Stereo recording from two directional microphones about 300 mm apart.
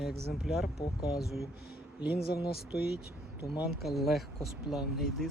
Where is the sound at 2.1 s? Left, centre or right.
Left.